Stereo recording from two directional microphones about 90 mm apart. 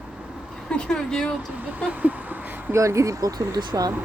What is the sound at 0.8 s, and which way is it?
Speech, 5° left (ahead or behind).